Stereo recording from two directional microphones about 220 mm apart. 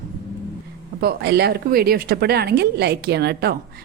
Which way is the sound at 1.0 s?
45° right (ahead or behind).